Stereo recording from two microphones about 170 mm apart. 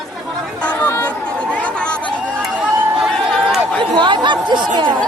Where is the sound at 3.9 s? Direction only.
25° right (ahead or behind).